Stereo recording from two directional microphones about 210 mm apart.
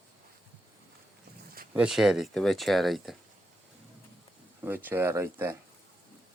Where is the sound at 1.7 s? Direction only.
5° right (ahead or behind).